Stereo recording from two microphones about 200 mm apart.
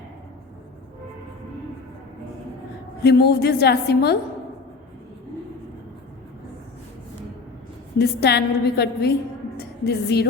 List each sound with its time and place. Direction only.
3.0 s a woman's voice: 55° left (ahead or behind)
7.9 s a woman's voice: 55° left (ahead or behind)